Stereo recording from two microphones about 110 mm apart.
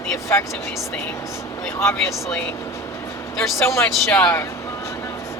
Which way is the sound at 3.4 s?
25° left (ahead or behind).